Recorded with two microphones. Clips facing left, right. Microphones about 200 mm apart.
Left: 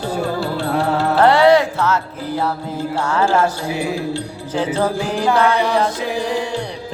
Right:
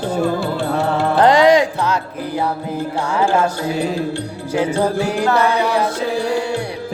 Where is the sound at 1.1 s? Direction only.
15° right (ahead or behind).